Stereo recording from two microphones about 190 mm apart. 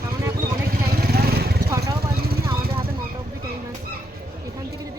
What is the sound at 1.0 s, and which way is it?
Vehicle, 55° right (ahead or behind).